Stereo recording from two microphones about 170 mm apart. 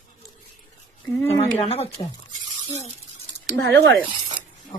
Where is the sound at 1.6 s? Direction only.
40° left (ahead or behind).